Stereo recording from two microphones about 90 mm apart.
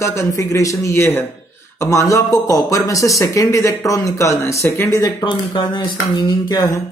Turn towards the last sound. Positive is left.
turn(degrees=45)  # may be behind; listen again after turning